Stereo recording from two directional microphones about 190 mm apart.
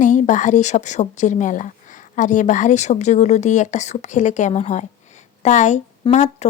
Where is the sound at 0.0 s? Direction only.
40° left (ahead or behind).